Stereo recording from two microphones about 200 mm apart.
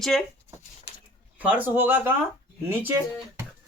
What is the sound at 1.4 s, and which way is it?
Speech, 10° right (ahead or behind).